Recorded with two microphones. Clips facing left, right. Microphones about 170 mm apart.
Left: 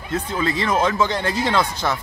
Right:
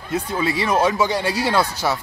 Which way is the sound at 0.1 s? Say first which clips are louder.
Right 1 dB; 10° right (ahead or behind).